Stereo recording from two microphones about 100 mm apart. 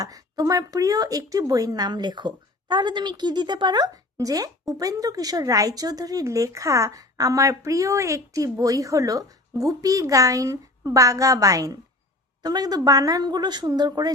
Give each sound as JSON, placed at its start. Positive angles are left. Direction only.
{"t": 0.0, "sound": "speech", "side_deg": -35}